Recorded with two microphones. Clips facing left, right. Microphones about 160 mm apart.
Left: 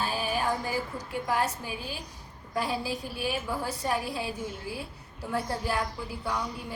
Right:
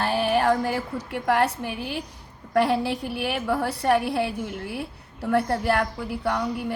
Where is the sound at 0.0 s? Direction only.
70° right (ahead or behind).